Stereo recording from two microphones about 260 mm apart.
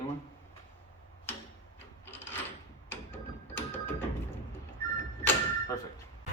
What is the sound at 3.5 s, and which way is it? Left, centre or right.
Music, centre.